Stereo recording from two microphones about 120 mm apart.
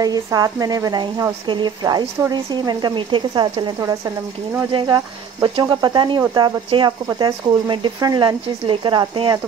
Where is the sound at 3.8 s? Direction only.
30° right (ahead or behind).